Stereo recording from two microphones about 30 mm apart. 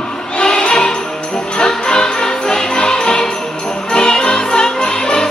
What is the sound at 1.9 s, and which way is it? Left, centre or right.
Jingle bell, left.